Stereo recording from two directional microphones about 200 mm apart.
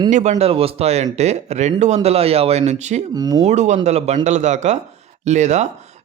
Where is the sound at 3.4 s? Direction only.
35° right (ahead or behind).